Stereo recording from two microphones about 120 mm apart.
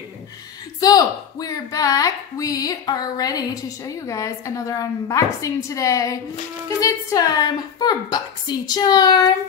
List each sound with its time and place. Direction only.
0.7 s a woman's voice: 30° left (ahead or behind)